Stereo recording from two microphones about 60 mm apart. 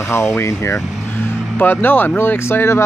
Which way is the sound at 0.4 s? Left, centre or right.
Left.